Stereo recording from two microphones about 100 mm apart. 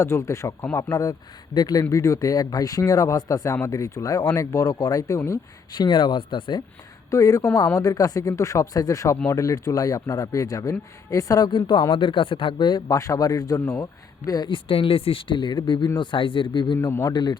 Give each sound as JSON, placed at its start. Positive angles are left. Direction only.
{"t": 0.0, "sound": "speech", "side_deg": 30}
{"t": 1.5, "sound": "a man's voice", "side_deg": 45}
{"t": 1.8, "sound": "speech", "side_deg": 35}
{"t": 5.7, "sound": "a man's voice", "side_deg": 50}
{"t": 7.1, "sound": "a man's voice", "side_deg": 35}
{"t": 11.9, "sound": "a man's voice", "side_deg": 60}
{"t": 14.5, "sound": "a man's voice", "side_deg": 60}
{"t": 16.7, "sound": "speech", "side_deg": 30}